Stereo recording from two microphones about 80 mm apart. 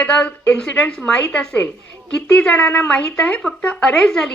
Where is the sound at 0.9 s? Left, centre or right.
Centre.